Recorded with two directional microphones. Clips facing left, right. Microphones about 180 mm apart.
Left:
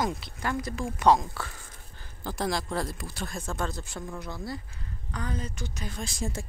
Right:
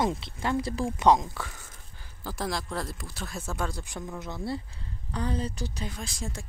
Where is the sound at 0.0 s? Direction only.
25° right (ahead or behind).